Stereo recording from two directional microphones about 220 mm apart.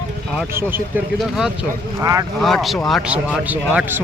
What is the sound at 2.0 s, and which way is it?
Speech, 15° right (ahead or behind).